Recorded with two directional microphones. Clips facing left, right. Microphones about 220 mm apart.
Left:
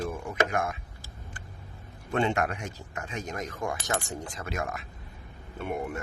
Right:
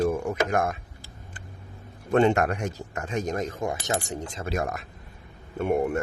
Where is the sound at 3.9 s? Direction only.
40° right (ahead or behind).